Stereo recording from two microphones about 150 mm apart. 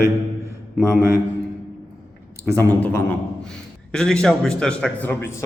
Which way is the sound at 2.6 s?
15° left (ahead or behind).